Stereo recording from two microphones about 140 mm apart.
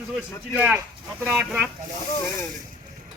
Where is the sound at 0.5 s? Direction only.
10° right (ahead or behind).